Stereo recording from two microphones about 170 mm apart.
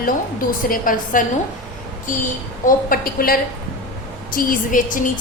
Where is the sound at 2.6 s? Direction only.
60° left (ahead or behind).